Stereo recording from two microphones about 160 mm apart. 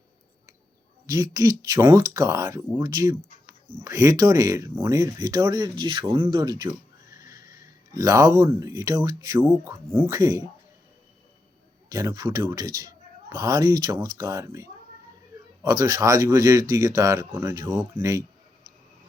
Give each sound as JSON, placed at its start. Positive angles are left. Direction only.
{"t": 1.1, "sound": "a man's voice", "side_deg": -20}
{"t": 11.9, "sound": "a man's voice", "side_deg": -20}